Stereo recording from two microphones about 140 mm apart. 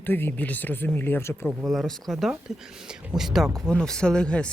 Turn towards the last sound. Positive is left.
turn(degrees=5)  # may be behind; listen again after turning